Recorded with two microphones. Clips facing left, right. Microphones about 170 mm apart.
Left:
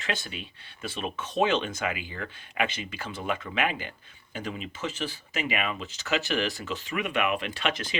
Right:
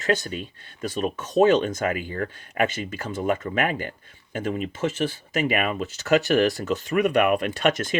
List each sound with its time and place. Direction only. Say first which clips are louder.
0.0 s speech: right 9 dB; 45° right (ahead or behind)